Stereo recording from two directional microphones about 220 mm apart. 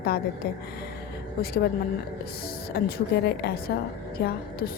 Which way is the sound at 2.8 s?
45° left (ahead or behind).